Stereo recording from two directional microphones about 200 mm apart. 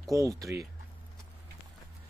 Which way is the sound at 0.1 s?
15° right (ahead or behind).